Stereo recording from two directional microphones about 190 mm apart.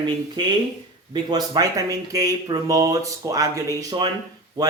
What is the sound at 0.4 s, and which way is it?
Speech, 20° right (ahead or behind).